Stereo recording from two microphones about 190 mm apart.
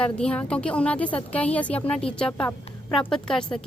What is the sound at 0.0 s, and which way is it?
A woman's voice, 5° left (ahead or behind).